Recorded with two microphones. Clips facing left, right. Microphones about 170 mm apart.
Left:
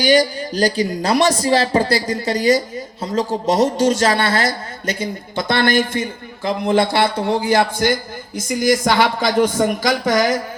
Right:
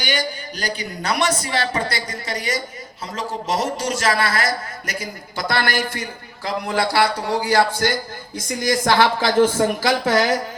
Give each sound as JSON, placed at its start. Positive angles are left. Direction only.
{"t": 0.0, "sound": "a man's voice", "side_deg": 35}
{"t": 9.0, "sound": "a man's voice", "side_deg": 15}